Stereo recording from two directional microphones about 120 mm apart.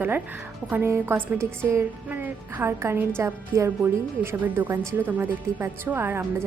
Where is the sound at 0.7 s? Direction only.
20° right (ahead or behind).